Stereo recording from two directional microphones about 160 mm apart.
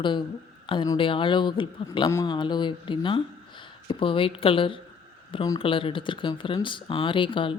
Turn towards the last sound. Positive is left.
turn(degrees=30)  # may be behind; listen again after turning